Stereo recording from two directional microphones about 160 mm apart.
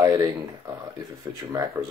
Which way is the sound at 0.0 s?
20° right (ahead or behind).